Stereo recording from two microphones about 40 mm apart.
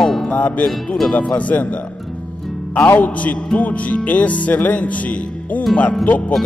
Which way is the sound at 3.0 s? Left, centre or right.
Left.